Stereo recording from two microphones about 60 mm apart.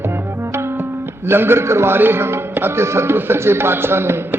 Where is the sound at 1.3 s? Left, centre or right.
Right.